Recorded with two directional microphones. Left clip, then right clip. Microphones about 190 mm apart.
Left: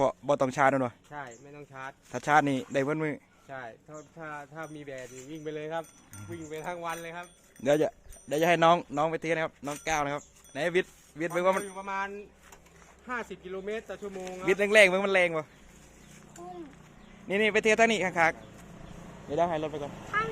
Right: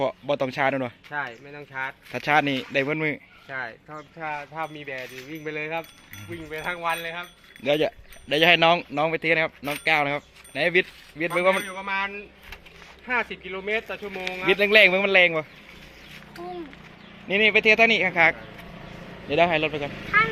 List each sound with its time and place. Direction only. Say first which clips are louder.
0.0 s speech: right 1 dB; 15° left (ahead or behind)
1.5 s speech: right 11 dB; 20° left (ahead or behind)
2.1 s a man's voice: right 3 dB; 5° right (ahead or behind)
2.4 s speech: right 4 dB; 10° left (ahead or behind)
2.8 s a man's voice: right 5 dB; 5° right (ahead or behind)
3.5 s speech: right 9 dB; 15° left (ahead or behind)
4.2 s speech: right 10 dB; 35° left (ahead or behind)
7.6 s speech: right 3 dB; 10° left (ahead or behind)
7.9 s speech: right 6 dB; centre (ahead or behind)
9.0 s speech: right 6 dB; 5° right (ahead or behind)
13.4 s speech: right 8 dB; 40° left (ahead or behind)
14.4 s a man's voice: right 4 dB; 5° right (ahead or behind)
17.2 s speech: right 7 dB; 5° right (ahead or behind)
18.1 s speech: right 6 dB; 15° right (ahead or behind)